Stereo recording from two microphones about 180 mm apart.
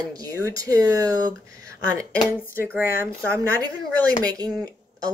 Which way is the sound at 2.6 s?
10° right (ahead or behind).